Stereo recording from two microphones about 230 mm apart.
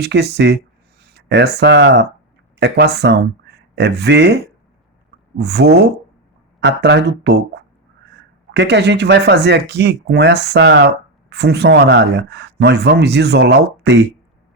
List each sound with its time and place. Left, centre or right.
0.0 s speech: right
5.4 s speech: right